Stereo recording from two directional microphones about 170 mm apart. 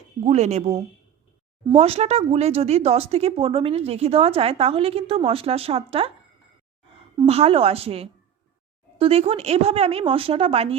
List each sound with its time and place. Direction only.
0.3 s a woman's voice: 40° right (ahead or behind)
7.3 s a woman's voice: 35° right (ahead or behind)